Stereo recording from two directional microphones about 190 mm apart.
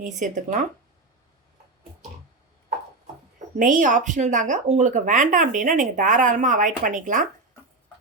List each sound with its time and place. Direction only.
0.2 s speech: 40° right (ahead or behind)
3.6 s speech: 45° right (ahead or behind)